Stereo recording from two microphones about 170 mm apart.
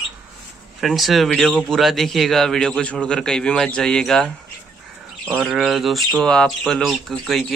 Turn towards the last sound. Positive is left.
turn(degrees=0)  # may be behind; listen again after turning